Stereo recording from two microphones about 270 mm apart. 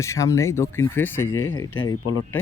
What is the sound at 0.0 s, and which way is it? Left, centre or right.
Speech, centre.